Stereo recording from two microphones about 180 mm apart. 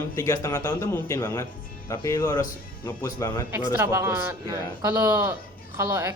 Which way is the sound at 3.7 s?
15° right (ahead or behind).